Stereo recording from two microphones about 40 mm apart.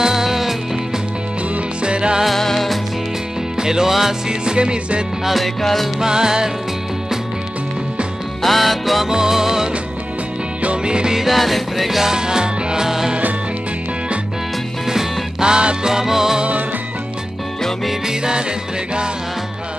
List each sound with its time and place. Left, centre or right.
0.0 s music: centre
1.5 s music: right
2.2 s music: centre
3.5 s music: centre
5.2 s music: centre
5.9 s music: centre
8.4 s music: centre
9.0 s music: centre
10.6 s music: right
11.1 s music: centre
12.1 s music: centre
15.4 s music: right
18.0 s music: centre